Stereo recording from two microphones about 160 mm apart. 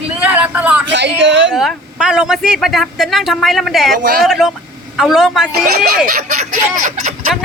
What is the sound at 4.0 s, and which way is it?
Speech, 65° right (ahead or behind).